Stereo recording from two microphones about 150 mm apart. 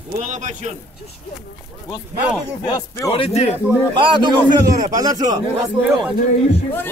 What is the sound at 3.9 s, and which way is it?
A man's voice, 30° right (ahead or behind).